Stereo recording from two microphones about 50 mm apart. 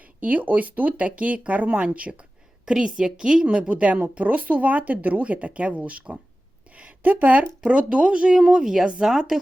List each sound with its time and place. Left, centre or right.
0.0 s speech: right
2.6 s a woman's voice: centre
6.7 s a sound: right
7.6 s speech: right